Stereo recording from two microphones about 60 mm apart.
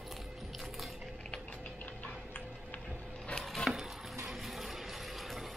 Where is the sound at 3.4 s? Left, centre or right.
Centre.